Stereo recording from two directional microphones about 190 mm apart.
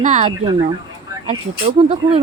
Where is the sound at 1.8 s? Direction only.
35° right (ahead or behind).